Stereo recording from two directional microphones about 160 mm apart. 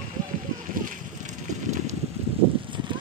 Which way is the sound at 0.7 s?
60° right (ahead or behind).